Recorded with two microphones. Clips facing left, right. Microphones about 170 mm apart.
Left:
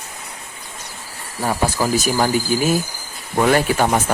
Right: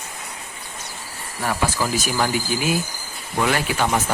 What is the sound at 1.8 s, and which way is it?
Speech, 35° left (ahead or behind).